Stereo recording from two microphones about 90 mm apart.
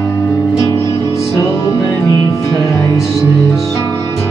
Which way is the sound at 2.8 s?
35° left (ahead or behind).